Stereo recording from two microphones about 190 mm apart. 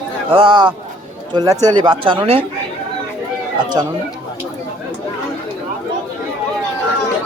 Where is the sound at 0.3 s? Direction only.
25° right (ahead or behind).